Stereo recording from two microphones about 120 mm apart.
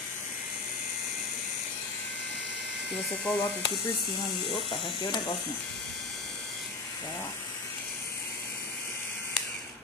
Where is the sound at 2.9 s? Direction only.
10° left (ahead or behind).